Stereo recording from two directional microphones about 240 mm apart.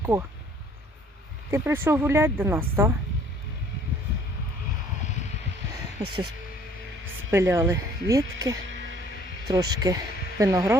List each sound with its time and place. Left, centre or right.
0.0 s speech: centre
1.5 s speech: centre
6.0 s speech: right
7.3 s speech: centre